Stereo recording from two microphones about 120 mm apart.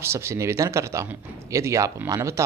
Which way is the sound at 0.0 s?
20° right (ahead or behind).